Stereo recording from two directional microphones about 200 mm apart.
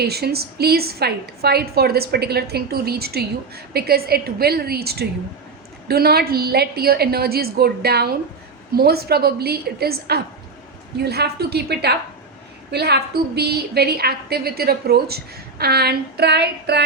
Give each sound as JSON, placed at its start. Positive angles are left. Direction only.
{"t": 0.0, "sound": "a woman's voice", "side_deg": -50}